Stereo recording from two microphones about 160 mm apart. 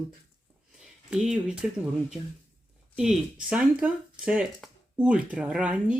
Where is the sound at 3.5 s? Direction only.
5° right (ahead or behind).